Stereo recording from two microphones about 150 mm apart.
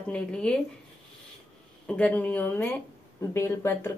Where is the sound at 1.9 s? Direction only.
10° left (ahead or behind).